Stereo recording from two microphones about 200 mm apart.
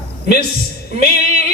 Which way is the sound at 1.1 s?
50° left (ahead or behind).